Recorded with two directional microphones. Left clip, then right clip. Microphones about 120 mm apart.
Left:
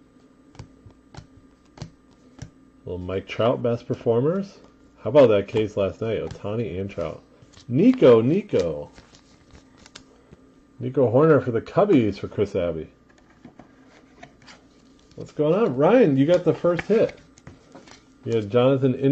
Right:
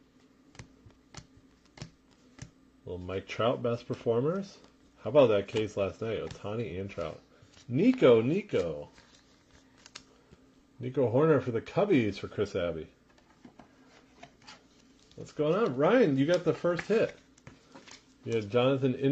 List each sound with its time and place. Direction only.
2.8 s speech: centre (ahead or behind)
10.8 s speech: centre (ahead or behind)
15.1 s speech: centre (ahead or behind)
18.2 s speech: centre (ahead or behind)